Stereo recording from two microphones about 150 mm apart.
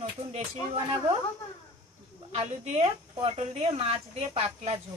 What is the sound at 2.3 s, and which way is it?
Speech, 50° right (ahead or behind).